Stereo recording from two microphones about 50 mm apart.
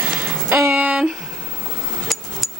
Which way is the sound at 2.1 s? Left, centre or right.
Centre.